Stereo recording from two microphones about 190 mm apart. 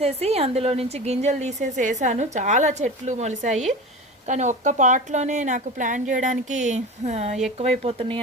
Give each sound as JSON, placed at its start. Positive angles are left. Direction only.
{"t": 0.0, "sound": "a woman's voice", "side_deg": -35}